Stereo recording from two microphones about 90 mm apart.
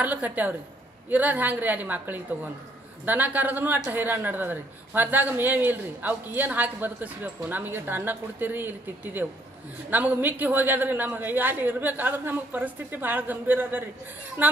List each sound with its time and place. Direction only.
0.0 s a woman's voice: 15° right (ahead or behind)